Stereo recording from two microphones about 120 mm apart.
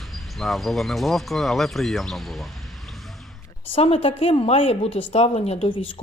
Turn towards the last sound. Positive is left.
turn(degrees=60)  # may be behind; listen again after turning